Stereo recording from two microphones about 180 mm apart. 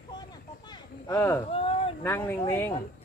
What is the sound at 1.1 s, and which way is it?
Speech, 10° left (ahead or behind).